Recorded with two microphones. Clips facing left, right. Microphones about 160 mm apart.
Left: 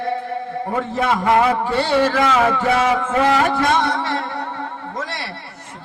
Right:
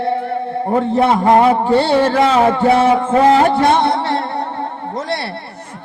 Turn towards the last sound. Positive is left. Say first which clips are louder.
# right 5 dB
turn(degrees=-35)  # may be behind; listen again after turning